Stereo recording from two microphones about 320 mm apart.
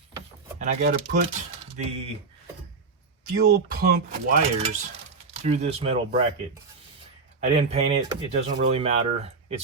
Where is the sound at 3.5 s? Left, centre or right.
Right.